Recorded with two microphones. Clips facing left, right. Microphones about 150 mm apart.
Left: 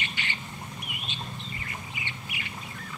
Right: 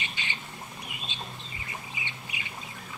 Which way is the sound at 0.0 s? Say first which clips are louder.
Left 2 dB; 15° right (ahead or behind).